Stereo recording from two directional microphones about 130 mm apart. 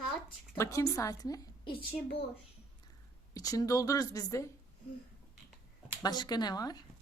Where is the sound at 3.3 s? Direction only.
30° left (ahead or behind).